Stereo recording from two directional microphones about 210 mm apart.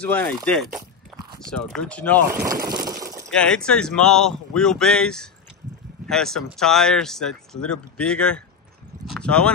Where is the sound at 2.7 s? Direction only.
15° right (ahead or behind).